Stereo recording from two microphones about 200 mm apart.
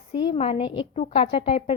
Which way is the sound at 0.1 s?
20° left (ahead or behind).